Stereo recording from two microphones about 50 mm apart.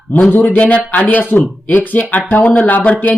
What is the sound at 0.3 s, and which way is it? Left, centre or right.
Speech, left.